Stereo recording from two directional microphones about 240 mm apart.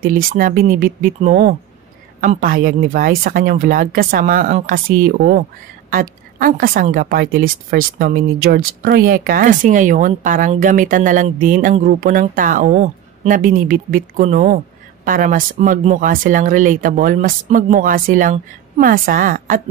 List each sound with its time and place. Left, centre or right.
0.0 s a woman's voice: right